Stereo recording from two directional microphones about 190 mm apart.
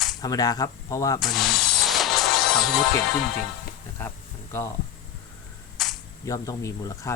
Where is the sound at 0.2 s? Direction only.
20° left (ahead or behind).